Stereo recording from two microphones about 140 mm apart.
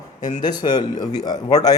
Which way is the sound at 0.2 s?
60° left (ahead or behind).